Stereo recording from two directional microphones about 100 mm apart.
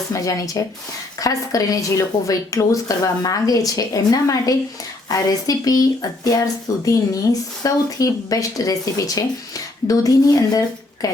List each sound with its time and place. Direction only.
0.1 s a woman's voice: 35° left (ahead or behind)